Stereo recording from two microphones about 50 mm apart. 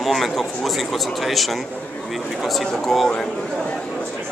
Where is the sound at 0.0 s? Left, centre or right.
Centre.